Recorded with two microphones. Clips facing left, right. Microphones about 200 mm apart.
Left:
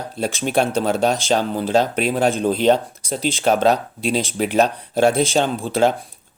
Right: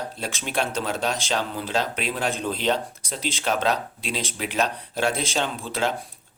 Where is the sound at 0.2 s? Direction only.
45° left (ahead or behind).